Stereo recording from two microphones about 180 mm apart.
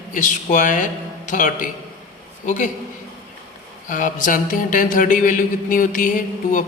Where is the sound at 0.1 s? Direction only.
45° left (ahead or behind).